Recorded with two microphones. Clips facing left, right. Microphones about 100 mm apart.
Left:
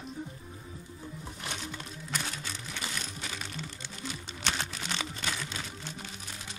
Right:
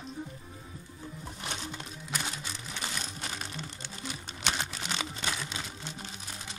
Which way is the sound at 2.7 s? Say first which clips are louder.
Right 1 dB; 25° right (ahead or behind).